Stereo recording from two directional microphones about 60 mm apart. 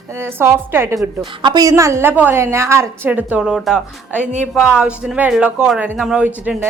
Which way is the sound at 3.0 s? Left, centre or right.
Right.